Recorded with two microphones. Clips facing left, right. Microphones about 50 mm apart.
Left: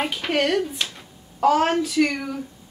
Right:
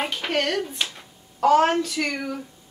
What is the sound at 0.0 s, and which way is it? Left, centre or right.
Speech, centre.